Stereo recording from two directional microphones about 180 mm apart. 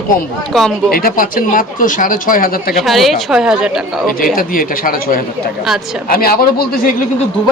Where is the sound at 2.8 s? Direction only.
Centre (ahead or behind).